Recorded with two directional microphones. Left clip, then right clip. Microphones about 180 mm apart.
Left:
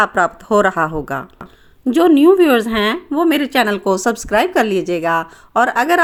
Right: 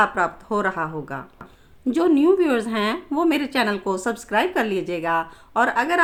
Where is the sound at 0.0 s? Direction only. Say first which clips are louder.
Left 5 dB; 45° left (ahead or behind).